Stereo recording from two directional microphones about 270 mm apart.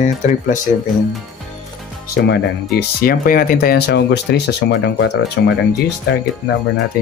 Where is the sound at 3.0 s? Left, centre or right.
Left.